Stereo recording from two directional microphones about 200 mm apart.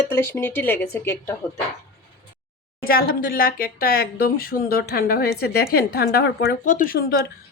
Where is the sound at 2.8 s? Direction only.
50° left (ahead or behind).